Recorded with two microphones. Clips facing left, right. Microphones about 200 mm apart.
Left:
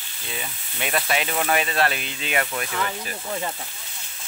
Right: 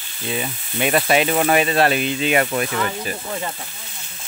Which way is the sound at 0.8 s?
20° right (ahead or behind).